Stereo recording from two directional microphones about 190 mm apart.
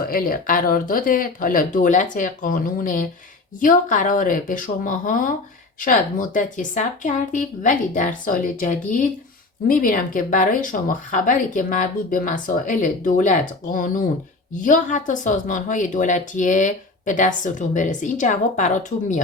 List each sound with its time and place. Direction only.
0.0 s speech: 50° left (ahead or behind)